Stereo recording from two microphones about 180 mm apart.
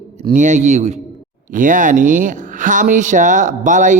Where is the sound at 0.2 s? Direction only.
40° right (ahead or behind).